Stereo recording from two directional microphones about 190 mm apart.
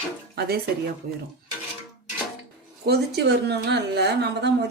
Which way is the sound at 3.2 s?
60° right (ahead or behind).